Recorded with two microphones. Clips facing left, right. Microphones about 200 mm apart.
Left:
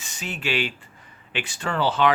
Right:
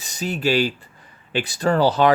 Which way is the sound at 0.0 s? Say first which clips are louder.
Right 8 dB; 40° right (ahead or behind).